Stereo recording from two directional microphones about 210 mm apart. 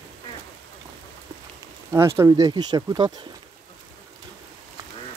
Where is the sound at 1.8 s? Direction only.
15° right (ahead or behind).